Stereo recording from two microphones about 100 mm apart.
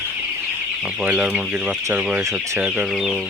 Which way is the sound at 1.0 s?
10° right (ahead or behind).